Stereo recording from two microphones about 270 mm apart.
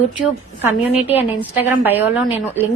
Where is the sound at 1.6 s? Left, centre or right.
Centre.